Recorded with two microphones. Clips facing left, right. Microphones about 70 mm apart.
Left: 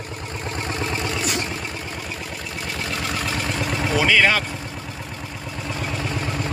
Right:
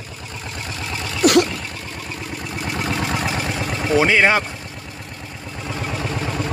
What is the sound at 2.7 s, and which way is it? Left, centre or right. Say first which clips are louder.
Vehicle: right 4 dB; right.